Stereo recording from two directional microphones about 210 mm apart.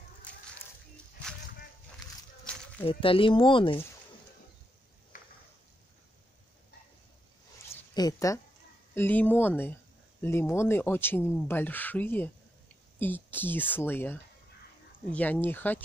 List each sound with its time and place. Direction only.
2.8 s speech: 25° left (ahead or behind)
7.7 s a sound: 15° left (ahead or behind)
8.9 s speech: 10° left (ahead or behind)